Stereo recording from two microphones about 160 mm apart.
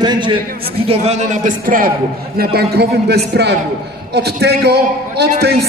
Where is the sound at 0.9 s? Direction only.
45° right (ahead or behind); by 1.9 s 60° right (ahead or behind).